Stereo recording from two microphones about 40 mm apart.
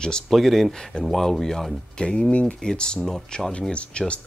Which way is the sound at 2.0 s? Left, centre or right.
Left.